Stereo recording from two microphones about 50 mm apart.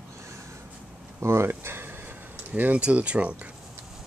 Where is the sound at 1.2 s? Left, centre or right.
Right.